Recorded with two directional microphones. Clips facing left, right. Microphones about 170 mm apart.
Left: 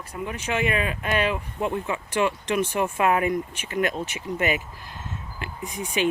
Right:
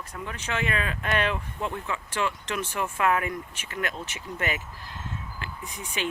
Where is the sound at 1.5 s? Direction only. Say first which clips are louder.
Left 5 dB; 15° left (ahead or behind).